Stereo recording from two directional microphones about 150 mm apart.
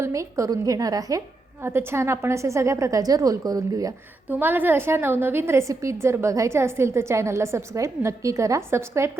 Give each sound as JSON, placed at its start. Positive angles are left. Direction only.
{"t": 0.0, "sound": "a woman's voice", "side_deg": -20}
{"t": 4.3, "sound": "a woman's voice", "side_deg": -15}